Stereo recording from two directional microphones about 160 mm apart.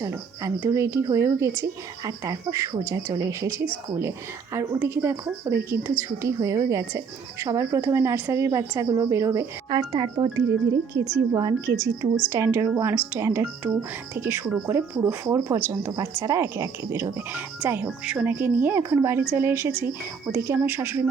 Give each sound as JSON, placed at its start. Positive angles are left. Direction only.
{"t": 0.0, "sound": "a woman's voice", "side_deg": -15}